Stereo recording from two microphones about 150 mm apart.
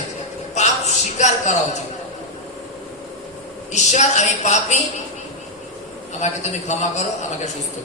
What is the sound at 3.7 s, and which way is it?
Speech, 50° left (ahead or behind).